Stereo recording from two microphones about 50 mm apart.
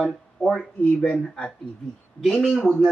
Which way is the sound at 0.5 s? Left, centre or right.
Centre.